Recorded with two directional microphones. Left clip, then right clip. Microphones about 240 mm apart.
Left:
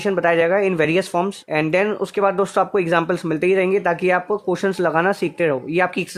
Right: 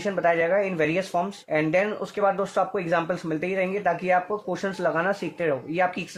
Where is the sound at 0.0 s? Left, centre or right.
Left.